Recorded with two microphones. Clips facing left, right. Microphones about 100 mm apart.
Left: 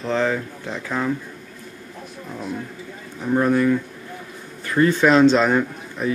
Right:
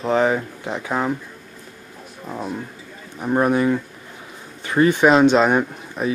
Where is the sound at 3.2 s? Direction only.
20° right (ahead or behind).